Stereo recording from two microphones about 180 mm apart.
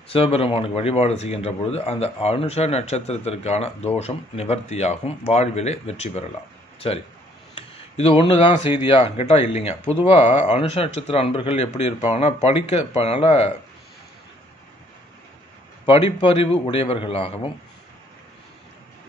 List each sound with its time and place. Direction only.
0.1 s speech: 30° left (ahead or behind)
15.8 s speech: 30° left (ahead or behind)